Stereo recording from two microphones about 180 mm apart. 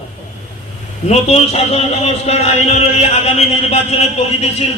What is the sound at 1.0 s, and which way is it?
Speech, 35° left (ahead or behind).